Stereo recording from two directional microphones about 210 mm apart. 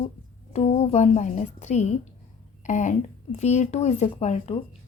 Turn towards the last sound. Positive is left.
turn(degrees=30)  # may be behind; listen again after turning